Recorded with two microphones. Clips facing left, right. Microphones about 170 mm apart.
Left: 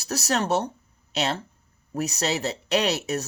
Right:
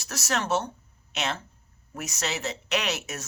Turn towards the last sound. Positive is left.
turn(degrees=35)  # may be behind; listen again after turning